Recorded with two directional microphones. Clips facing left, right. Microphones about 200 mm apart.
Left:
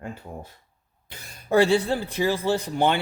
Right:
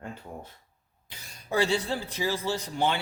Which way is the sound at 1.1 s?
55° left (ahead or behind).